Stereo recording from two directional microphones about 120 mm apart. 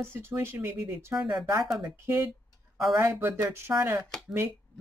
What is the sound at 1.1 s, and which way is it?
Speech, 5° right (ahead or behind).